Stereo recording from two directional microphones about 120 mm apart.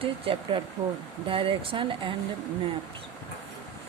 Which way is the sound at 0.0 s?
50° right (ahead or behind).